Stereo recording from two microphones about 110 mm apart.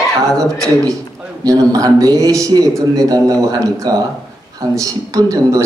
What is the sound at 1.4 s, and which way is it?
A man's voice, 35° right (ahead or behind).